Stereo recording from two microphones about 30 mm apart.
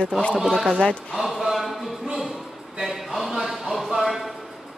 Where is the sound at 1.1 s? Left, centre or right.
Centre.